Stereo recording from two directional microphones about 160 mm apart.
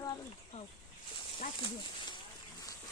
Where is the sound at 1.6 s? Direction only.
30° left (ahead or behind).